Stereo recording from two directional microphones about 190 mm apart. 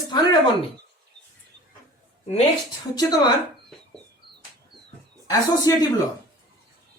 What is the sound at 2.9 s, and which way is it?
Speech, 20° left (ahead or behind).